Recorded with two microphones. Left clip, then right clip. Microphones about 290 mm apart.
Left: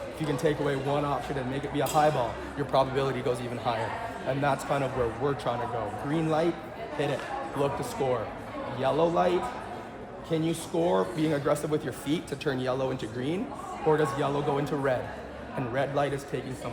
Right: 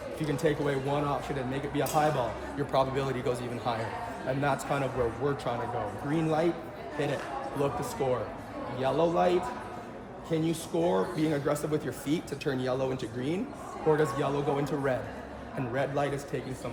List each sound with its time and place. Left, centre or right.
0.3 s speech: centre
8.0 s speech: centre